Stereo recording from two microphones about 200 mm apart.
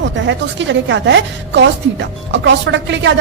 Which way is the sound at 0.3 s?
65° right (ahead or behind).